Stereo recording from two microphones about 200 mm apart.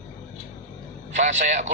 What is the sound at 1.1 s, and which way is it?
Speech, 40° right (ahead or behind).